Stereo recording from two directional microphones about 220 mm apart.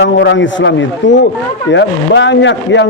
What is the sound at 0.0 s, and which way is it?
A man's voice, 55° left (ahead or behind).